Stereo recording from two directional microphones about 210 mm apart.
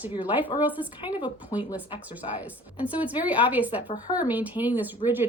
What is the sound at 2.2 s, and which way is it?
Speech, 25° left (ahead or behind).